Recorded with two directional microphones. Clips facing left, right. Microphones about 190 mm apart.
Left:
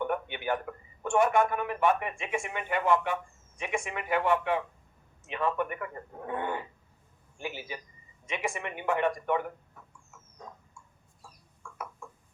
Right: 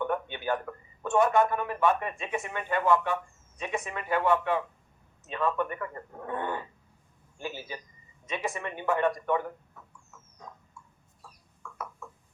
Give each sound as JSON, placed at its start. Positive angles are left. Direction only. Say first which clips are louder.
{"t": 0.0, "sound": "a man's voice", "louder": "right 1 dB", "side_deg": 15}